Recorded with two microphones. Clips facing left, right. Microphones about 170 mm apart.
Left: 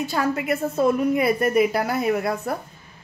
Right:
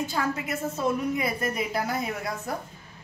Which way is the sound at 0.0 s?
70° left (ahead or behind).